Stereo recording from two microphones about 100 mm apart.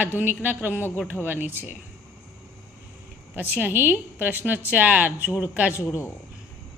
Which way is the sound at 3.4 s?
20° right (ahead or behind).